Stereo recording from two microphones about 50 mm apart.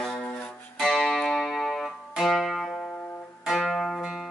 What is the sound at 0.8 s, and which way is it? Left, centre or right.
Music, centre.